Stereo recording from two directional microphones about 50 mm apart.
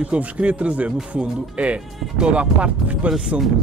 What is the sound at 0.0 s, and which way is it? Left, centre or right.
Speech, right.